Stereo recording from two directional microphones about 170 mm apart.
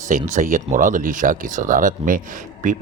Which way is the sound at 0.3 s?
50° right (ahead or behind).